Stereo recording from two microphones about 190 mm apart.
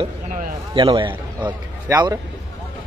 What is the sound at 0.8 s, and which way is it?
A man's voice, 25° right (ahead or behind).